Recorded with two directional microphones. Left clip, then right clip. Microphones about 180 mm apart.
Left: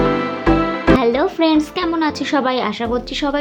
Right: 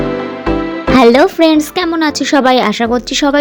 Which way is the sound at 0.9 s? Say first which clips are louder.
Right 9 dB; 50° right (ahead or behind).